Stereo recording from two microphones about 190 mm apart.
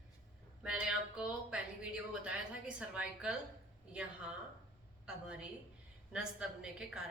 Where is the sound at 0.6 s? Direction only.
5° right (ahead or behind).